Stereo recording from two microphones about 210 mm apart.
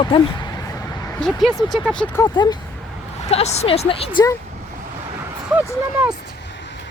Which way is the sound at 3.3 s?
30° left (ahead or behind).